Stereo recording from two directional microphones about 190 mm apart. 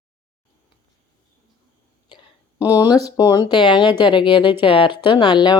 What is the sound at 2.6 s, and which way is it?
Speech, 20° left (ahead or behind).